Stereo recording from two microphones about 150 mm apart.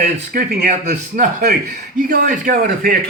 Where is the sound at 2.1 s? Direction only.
70° right (ahead or behind).